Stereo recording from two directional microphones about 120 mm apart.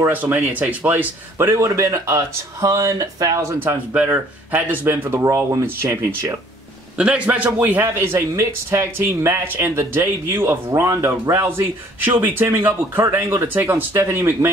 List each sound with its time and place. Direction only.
0.1 s a man's voice: 15° right (ahead or behind)
3.6 s speech: 15° right (ahead or behind)
5.2 s a man's voice: 25° right (ahead or behind)
7.0 s a man's voice: 10° right (ahead or behind)